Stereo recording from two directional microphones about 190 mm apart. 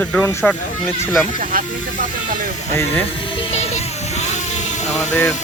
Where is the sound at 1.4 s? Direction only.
45° right (ahead or behind).